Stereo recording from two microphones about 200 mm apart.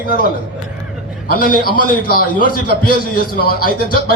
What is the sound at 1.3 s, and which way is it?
A man's voice, 45° left (ahead or behind).